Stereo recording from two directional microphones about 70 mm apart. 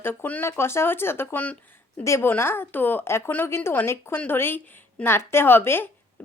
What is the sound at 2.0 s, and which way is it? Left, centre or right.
A woman's voice, left.